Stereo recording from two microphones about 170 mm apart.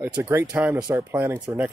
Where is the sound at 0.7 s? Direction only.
20° right (ahead or behind).